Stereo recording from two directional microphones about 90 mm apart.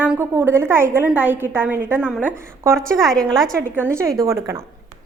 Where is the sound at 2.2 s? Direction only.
30° right (ahead or behind).